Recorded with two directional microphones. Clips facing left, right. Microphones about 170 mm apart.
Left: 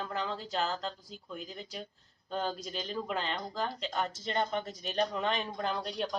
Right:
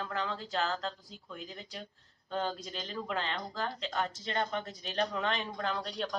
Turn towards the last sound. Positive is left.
turn(degrees=5)  # may be behind; listen again after turning